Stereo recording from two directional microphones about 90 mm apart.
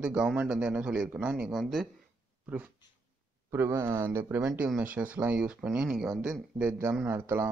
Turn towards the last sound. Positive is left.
turn(degrees=-30)  # may be behind; listen again after turning